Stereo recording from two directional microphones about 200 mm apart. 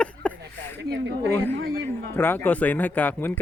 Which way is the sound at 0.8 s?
60° right (ahead or behind).